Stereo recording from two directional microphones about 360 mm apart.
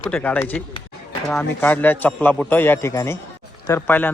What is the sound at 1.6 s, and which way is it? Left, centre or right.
A man's voice, centre.